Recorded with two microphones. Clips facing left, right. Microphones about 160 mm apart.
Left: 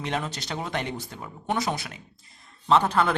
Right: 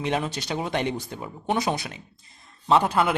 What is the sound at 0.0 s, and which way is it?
Speech, 15° right (ahead or behind).